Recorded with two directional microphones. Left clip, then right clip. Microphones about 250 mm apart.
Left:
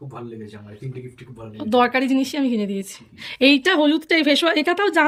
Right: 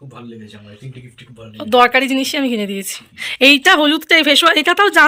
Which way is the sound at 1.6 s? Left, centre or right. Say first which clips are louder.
Right 7 dB; centre.